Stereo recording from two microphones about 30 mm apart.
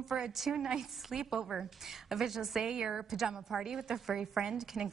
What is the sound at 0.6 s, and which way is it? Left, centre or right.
Speech, centre.